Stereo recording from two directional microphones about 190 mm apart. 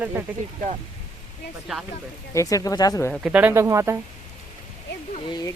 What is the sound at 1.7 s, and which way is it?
Speech, centre (ahead or behind).